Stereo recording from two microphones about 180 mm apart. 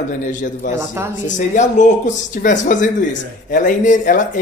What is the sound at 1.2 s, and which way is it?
Speech, 45° left (ahead or behind).